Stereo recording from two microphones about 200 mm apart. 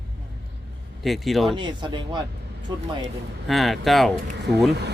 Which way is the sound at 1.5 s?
25° right (ahead or behind).